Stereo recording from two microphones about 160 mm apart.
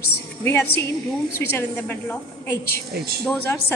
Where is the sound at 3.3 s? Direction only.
15° left (ahead or behind).